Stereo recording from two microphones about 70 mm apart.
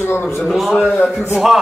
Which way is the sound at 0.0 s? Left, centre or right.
Left.